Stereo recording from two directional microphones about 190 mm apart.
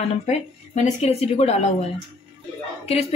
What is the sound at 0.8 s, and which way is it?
A woman's voice, 35° left (ahead or behind).